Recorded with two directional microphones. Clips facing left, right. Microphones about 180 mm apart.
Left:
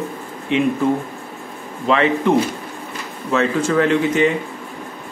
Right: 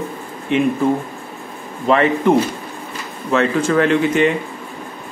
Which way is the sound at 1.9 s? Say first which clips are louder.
Right 2 dB; 45° right (ahead or behind).